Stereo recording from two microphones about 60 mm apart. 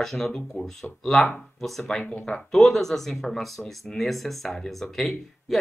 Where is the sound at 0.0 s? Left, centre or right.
Centre.